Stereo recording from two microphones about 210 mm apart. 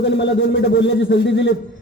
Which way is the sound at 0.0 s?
55° left (ahead or behind).